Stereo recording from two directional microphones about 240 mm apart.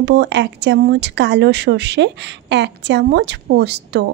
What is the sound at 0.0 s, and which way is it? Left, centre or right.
A woman's voice, right.